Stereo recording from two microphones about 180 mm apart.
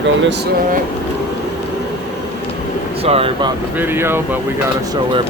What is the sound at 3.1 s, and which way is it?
Speech, 30° right (ahead or behind).